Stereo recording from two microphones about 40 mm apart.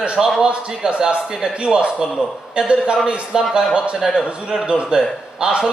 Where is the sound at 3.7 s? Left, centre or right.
Right.